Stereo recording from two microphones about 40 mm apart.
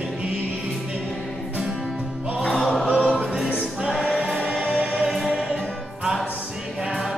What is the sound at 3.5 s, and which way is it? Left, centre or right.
Music, right.